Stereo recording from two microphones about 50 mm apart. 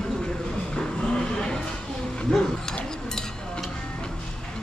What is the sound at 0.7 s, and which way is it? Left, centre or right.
Music, centre.